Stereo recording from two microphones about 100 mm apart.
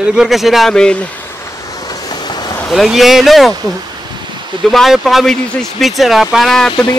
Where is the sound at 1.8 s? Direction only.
40° left (ahead or behind).